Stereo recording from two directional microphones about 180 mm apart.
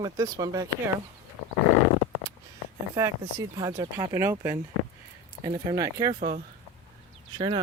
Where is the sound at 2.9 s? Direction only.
15° right (ahead or behind).